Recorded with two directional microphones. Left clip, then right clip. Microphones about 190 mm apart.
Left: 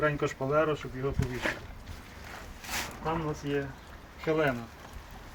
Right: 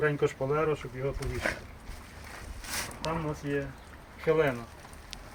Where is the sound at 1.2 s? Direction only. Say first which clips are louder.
Even; 5° left (ahead or behind).